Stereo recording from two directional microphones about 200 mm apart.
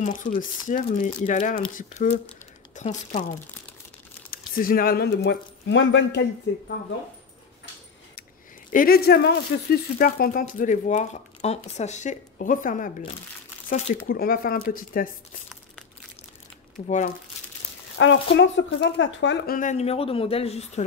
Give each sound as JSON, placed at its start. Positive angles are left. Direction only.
{"t": 0.0, "sound": "speech", "side_deg": 40}
{"t": 4.3, "sound": "speech", "side_deg": 45}
{"t": 8.7, "sound": "speech", "side_deg": 50}
{"t": 16.7, "sound": "speech", "side_deg": 40}
{"t": 17.9, "sound": "speech", "side_deg": 65}
{"t": 19.5, "sound": "speech", "side_deg": 40}